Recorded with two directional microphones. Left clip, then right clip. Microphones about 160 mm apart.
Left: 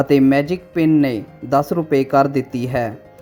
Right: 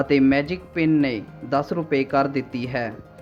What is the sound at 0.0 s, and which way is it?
A woman's voice, 45° left (ahead or behind).